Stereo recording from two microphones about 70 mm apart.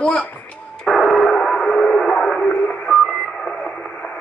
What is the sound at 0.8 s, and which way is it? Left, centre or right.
Radio, centre.